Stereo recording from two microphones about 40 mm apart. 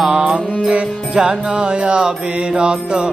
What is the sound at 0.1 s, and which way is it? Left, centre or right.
Music, right.